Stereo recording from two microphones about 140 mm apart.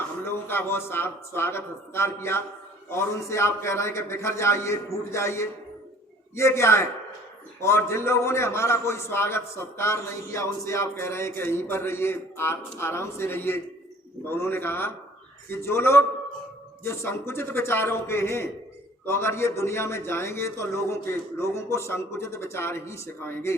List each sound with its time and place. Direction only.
0.3 s a man's voice: 15° left (ahead or behind)